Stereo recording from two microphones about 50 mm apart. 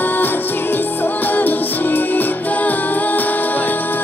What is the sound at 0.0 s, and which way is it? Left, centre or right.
Music, left.